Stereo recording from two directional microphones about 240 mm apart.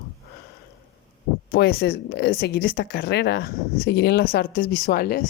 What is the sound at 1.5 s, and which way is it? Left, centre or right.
A woman's voice, left.